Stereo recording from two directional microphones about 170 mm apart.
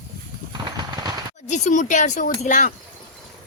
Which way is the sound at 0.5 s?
25° right (ahead or behind).